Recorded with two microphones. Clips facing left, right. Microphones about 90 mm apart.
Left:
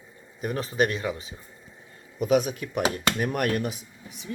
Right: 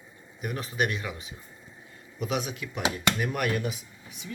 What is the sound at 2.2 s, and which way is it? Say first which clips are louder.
Speech: left 8 dB; 45° left (ahead or behind).